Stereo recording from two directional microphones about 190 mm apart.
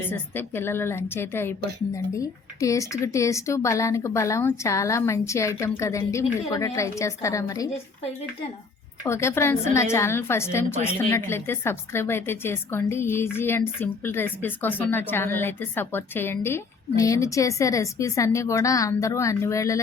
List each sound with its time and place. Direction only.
0.1 s a woman's voice: 10° left (ahead or behind)
9.0 s a woman's voice: 15° left (ahead or behind)